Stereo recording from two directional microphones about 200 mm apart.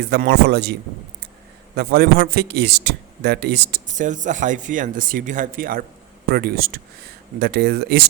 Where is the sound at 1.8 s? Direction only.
50° right (ahead or behind).